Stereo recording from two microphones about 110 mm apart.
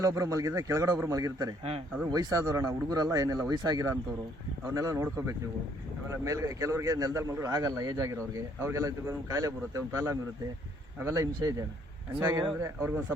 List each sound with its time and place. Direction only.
0.0 s speech: 30° right (ahead or behind)
6.2 s a man's voice: 30° right (ahead or behind)